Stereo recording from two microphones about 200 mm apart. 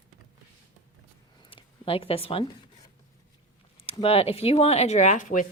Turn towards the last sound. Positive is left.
turn(degrees=40)  # may be behind; listen again after turning